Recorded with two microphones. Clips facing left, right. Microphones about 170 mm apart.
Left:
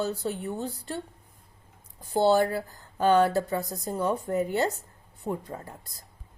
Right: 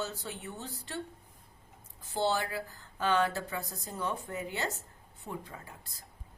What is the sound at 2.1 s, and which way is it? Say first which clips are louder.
Speech: left 9 dB; 40° left (ahead or behind).